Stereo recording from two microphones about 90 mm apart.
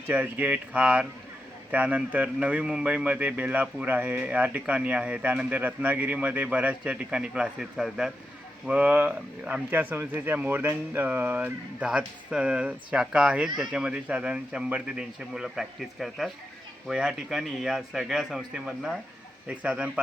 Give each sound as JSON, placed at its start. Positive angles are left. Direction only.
{"t": 0.1, "sound": "a man's voice", "side_deg": -20}